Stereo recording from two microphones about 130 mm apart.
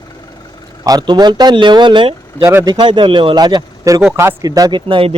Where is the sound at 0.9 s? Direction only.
30° right (ahead or behind).